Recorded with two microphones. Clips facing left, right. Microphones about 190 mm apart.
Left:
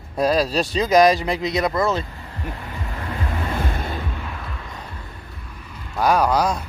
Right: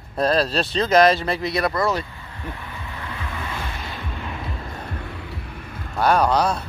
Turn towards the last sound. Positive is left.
turn(degrees=10)  # may be behind; listen again after turning